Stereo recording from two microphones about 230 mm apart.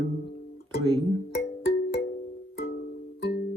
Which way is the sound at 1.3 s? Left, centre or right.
Left.